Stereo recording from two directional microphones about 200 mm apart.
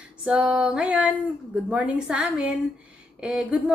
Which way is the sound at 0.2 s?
5° right (ahead or behind).